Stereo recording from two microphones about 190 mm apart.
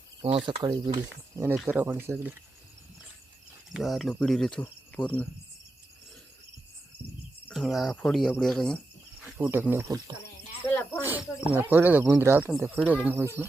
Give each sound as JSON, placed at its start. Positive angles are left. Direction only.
{"t": 0.3, "sound": "speech", "side_deg": -30}
{"t": 3.7, "sound": "cricket", "side_deg": 0}
{"t": 7.4, "sound": "cricket", "side_deg": 0}
{"t": 9.2, "sound": "speech", "side_deg": -10}